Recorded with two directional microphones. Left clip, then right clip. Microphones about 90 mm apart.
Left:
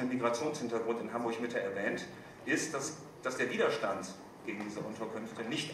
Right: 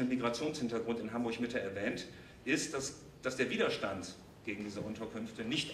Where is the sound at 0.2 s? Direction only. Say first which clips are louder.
Left 3 dB; 15° right (ahead or behind).